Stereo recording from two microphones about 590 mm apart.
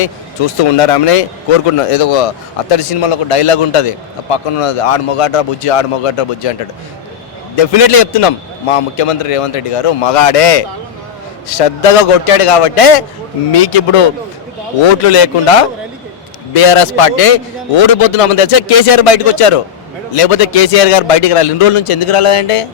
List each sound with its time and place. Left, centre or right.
0.6 s speech: left
15.0 s speech: left